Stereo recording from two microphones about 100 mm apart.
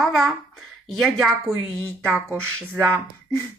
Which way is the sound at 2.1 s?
20° right (ahead or behind).